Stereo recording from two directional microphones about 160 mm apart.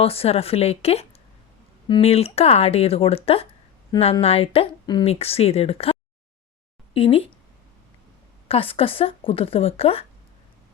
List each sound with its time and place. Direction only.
0.0 s speech: 40° left (ahead or behind)
8.4 s speech: 35° left (ahead or behind)